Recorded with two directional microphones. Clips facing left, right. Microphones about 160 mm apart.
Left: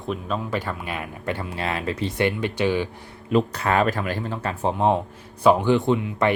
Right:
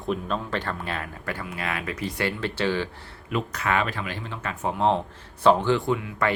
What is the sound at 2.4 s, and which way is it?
Speech, 15° left (ahead or behind).